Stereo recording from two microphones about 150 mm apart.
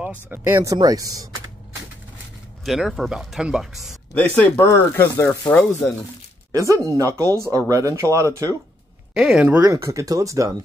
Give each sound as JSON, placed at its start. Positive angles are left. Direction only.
{"t": 0.3, "sound": "speech", "side_deg": -15}
{"t": 2.6, "sound": "speech", "side_deg": 0}
{"t": 4.1, "sound": "speech", "side_deg": 10}
{"t": 6.5, "sound": "speech", "side_deg": -20}
{"t": 9.1, "sound": "speech", "side_deg": -5}
{"t": 9.6, "sound": "speech", "side_deg": -20}